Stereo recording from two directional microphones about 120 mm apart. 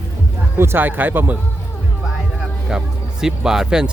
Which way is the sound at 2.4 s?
5° right (ahead or behind).